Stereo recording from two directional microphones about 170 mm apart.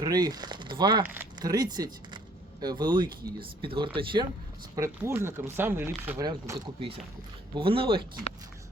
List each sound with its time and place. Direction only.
0.0 s speech: 25° right (ahead or behind)
1.0 s speech: 10° right (ahead or behind)
1.4 s speech: 20° right (ahead or behind)
4.7 s speech: 15° right (ahead or behind)
7.5 s speech: 30° right (ahead or behind)